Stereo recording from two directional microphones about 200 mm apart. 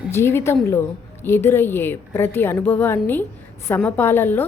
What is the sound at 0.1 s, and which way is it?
A woman's voice, 10° left (ahead or behind).